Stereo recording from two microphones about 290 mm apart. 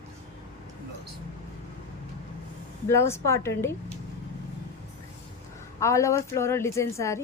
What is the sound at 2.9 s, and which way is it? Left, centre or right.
Speech, centre.